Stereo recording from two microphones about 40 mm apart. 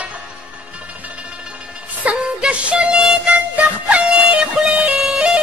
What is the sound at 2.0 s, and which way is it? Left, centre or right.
Music, right.